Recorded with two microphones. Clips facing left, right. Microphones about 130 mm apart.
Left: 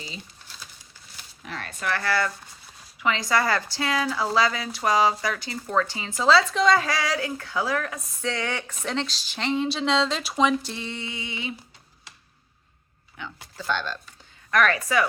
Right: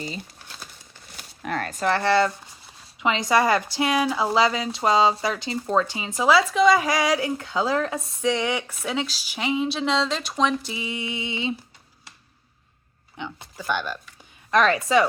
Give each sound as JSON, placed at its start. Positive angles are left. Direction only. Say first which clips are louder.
{"t": 0.0, "sound": "crumpling", "louder": "right 7 dB", "side_deg": -50}
{"t": 1.1, "sound": "a sound", "louder": "right 9 dB", "side_deg": -55}
{"t": 1.8, "sound": "a woman's voice", "louder": "right 5 dB", "side_deg": -25}
{"t": 8.2, "sound": "speech", "louder": "right 5 dB", "side_deg": -15}
{"t": 13.1, "sound": "a woman's voice", "louder": "right 3 dB", "side_deg": -20}